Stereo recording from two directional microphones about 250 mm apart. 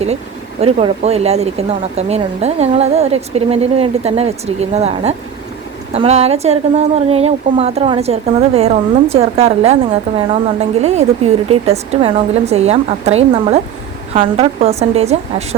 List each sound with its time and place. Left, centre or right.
0.6 s speech: right